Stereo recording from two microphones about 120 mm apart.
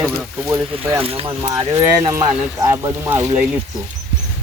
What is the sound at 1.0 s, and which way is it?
Speech, 50° right (ahead or behind).